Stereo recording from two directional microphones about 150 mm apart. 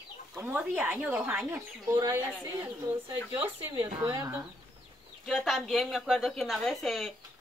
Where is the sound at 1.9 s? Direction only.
25° right (ahead or behind).